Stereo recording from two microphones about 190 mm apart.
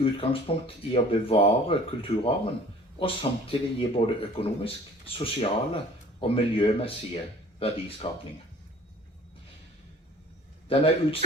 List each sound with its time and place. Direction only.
0.0 s speech: 30° left (ahead or behind)
10.7 s speech: 30° left (ahead or behind)